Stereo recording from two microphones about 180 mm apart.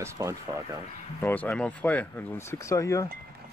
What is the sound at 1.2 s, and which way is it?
Speech, 10° left (ahead or behind).